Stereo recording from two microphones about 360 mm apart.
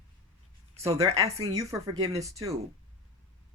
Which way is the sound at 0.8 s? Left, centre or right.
Centre.